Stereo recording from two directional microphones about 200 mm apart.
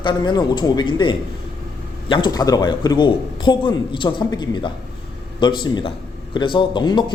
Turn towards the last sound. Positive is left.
turn(degrees=20)  # may be behind; listen again after turning